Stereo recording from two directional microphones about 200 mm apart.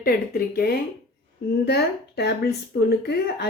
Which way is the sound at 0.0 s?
50° left (ahead or behind).